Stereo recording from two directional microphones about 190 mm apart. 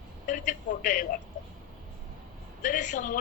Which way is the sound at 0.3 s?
45° left (ahead or behind).